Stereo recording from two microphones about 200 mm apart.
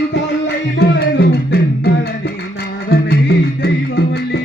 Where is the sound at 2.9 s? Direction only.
55° left (ahead or behind).